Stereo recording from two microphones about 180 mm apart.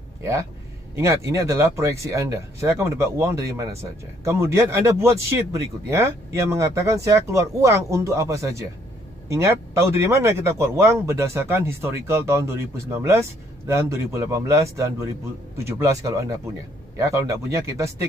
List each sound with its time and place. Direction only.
0.2 s speech: 15° right (ahead or behind)